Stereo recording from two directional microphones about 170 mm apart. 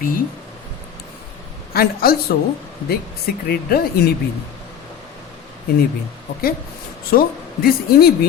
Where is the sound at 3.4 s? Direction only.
65° left (ahead or behind).